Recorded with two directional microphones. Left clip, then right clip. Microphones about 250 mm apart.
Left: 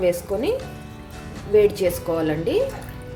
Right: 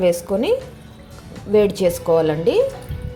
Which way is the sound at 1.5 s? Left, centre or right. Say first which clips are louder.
Right 1 dB; right.